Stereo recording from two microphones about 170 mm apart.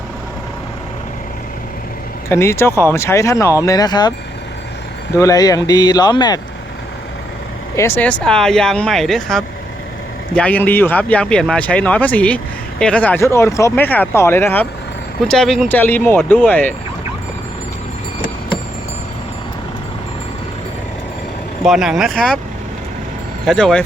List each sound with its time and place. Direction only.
2.3 s speech: 15° left (ahead or behind)
5.1 s speech: 20° left (ahead or behind)
7.8 s speech: 10° left (ahead or behind)
15.8 s speech: 10° left (ahead or behind)
21.6 s speech: 5° right (ahead or behind)
23.5 s speech: 5° left (ahead or behind)